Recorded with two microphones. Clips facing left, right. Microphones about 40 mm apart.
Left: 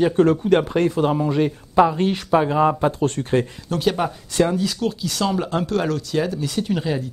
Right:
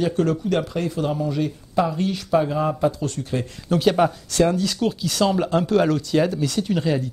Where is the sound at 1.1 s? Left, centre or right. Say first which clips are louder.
Left 4 dB; left.